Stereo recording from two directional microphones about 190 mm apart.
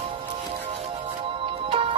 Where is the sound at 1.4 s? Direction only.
30° right (ahead or behind).